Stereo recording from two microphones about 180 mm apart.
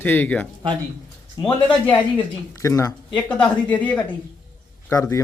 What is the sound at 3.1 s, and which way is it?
A man's voice, 5° left (ahead or behind).